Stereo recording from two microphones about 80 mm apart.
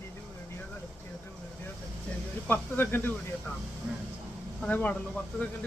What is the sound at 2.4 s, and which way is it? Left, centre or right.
Speech, left.